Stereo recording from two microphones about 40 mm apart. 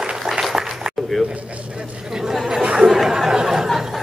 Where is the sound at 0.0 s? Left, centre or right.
Centre.